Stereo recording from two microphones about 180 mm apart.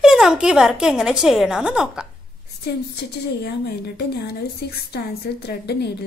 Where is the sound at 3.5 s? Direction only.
65° left (ahead or behind).